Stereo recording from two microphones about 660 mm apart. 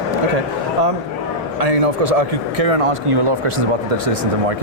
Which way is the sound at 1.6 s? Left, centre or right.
Right.